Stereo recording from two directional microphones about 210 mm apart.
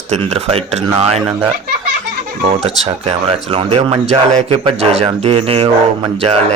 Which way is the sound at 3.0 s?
25° right (ahead or behind).